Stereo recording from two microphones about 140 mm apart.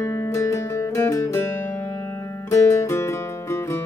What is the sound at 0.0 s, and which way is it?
Music, 20° left (ahead or behind).